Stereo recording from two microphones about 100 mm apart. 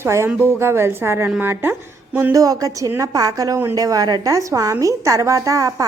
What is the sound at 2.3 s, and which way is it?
A woman's voice, 35° right (ahead or behind).